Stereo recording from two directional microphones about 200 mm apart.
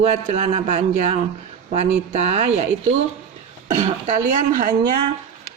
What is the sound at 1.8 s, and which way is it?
A woman's voice, 35° right (ahead or behind).